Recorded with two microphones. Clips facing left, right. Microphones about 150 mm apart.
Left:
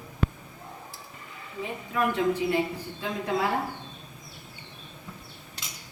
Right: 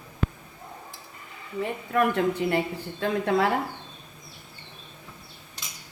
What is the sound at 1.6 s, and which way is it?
Speech, 60° right (ahead or behind).